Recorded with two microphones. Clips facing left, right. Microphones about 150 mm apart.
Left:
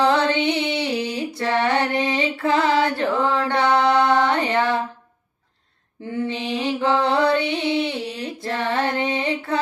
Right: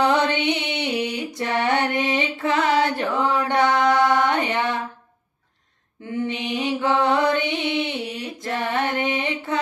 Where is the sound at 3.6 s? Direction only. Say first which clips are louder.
Left 1 dB; 30° left (ahead or behind).